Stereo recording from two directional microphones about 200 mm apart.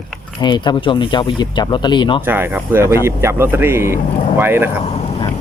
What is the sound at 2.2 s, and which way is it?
Speech, 10° right (ahead or behind).